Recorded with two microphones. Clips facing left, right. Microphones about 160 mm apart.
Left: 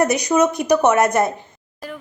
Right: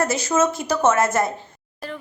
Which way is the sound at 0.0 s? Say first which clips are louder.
Left 4 dB; 20° left (ahead or behind).